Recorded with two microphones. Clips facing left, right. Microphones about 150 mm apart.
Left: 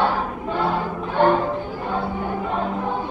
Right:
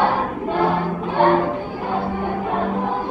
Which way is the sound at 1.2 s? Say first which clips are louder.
Right 1 dB; 10° right (ahead or behind).